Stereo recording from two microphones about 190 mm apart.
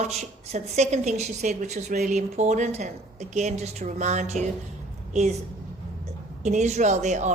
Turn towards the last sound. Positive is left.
turn(degrees=-40)  # may be behind; listen again after turning